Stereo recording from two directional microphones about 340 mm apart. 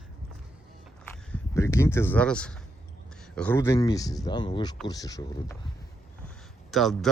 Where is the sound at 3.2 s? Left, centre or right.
Centre.